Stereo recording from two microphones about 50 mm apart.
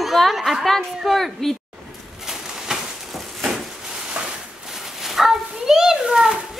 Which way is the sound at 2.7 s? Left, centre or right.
Centre.